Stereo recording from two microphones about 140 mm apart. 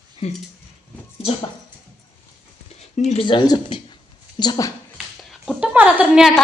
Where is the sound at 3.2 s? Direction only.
35° left (ahead or behind).